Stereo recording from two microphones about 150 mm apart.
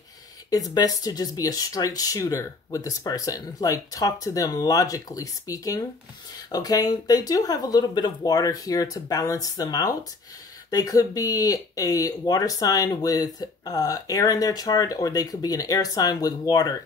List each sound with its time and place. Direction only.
0.5 s speech: 25° left (ahead or behind)